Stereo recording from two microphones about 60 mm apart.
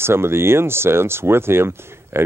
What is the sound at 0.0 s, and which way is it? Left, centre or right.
Speech, right.